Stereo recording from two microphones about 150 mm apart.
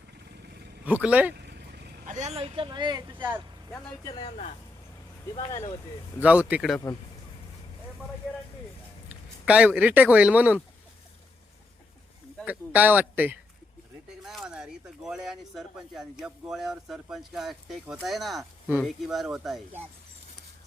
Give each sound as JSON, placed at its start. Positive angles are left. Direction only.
{"t": 0.9, "sound": "speech", "side_deg": -10}
{"t": 1.4, "sound": "vehicle", "side_deg": -90}
{"t": 2.1, "sound": "speech", "side_deg": -45}
{"t": 3.2, "sound": "speech", "side_deg": -10}
{"t": 4.0, "sound": "speech", "side_deg": 30}
{"t": 6.2, "sound": "speech", "side_deg": -10}
{"t": 6.9, "sound": "speech", "side_deg": 25}
{"t": 9.5, "sound": "speech", "side_deg": -10}
{"t": 12.5, "sound": "speech", "side_deg": -10}